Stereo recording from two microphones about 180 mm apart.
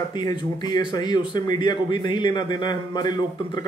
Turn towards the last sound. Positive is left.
turn(degrees=25)  # may be behind; listen again after turning